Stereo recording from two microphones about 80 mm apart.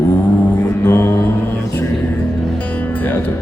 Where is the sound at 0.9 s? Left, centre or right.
Left.